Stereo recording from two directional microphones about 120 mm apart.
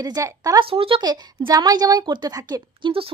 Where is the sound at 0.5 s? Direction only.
50° right (ahead or behind).